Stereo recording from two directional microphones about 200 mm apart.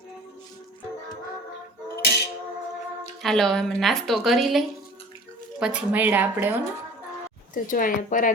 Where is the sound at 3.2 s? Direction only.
Centre (ahead or behind).